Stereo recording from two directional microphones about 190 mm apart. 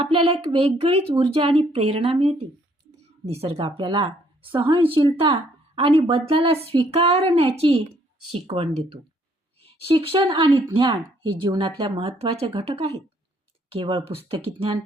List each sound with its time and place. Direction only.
0.0 s speech: 30° right (ahead or behind)